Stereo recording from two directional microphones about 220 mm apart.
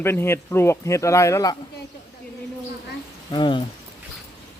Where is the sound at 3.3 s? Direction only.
20° left (ahead or behind).